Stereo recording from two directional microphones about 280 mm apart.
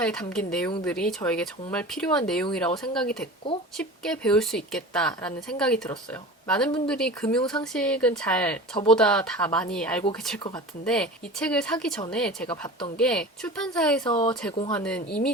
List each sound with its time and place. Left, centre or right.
0.0 s a woman's voice: centre
14.0 s speech: centre
14.7 s a woman's voice: centre